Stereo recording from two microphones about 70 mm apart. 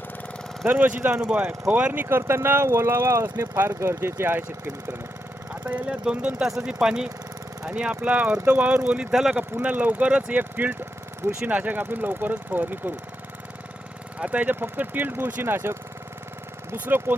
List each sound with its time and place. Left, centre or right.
0.7 s speech: right
5.6 s speech: centre
9.3 s speech: right
14.2 s speech: right